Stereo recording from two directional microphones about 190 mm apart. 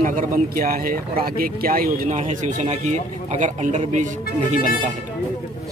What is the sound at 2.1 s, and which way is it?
A man's voice, 35° right (ahead or behind).